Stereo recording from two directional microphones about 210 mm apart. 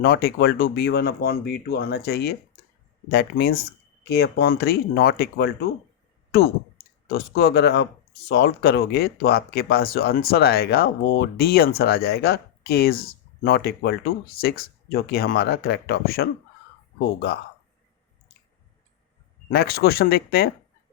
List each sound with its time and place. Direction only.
0.0 s speech: 45° left (ahead or behind)
7.1 s speech: 45° left (ahead or behind)
19.5 s speech: 45° left (ahead or behind)